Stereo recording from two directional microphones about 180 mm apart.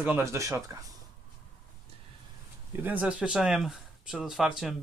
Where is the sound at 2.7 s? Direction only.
10° right (ahead or behind).